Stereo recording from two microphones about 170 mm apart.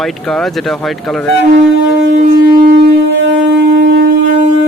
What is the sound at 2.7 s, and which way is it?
Shofar, 90° right.